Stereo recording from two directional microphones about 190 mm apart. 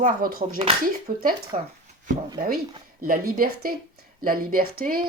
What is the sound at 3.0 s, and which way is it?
Speech, 50° right (ahead or behind).